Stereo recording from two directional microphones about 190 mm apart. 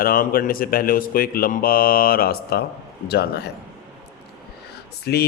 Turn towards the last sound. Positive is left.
turn(degrees=60)  # may be behind; listen again after turning